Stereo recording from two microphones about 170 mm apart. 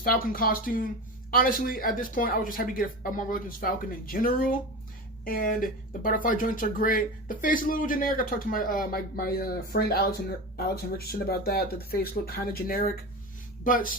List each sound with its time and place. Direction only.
0.0 s speech: 60° left (ahead or behind)